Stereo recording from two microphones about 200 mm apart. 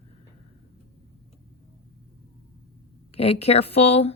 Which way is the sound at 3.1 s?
30° left (ahead or behind).